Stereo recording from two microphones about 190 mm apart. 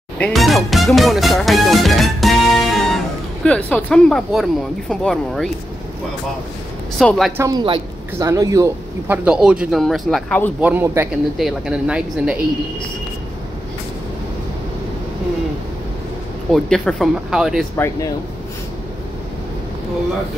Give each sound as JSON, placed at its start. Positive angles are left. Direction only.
{"t": 0.2, "sound": "speech", "side_deg": 0}
{"t": 7.0, "sound": "speech", "side_deg": 0}
{"t": 7.3, "sound": "speech", "side_deg": -20}
{"t": 10.6, "sound": "a man's voice", "side_deg": -10}
{"t": 16.5, "sound": "speech", "side_deg": 5}